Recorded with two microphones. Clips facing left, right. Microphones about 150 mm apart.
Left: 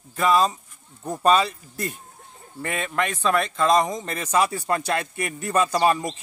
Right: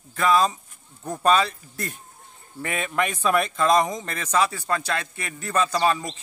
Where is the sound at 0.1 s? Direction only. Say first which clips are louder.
Even; 5° left (ahead or behind).